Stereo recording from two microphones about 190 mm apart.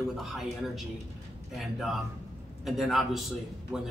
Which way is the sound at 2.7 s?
Centre (ahead or behind).